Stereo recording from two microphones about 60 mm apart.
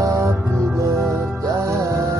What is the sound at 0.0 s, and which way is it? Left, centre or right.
Music, right.